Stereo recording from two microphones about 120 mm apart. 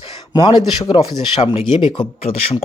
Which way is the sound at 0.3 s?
40° left (ahead or behind).